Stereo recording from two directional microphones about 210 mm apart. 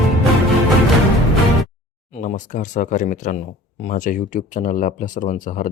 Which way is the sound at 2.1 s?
35° left (ahead or behind).